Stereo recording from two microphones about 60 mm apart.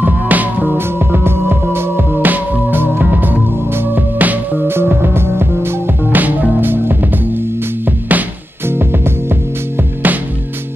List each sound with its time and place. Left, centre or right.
0.0 s music: right
0.7 s music: right
8.6 s music: right
10.0 s music: right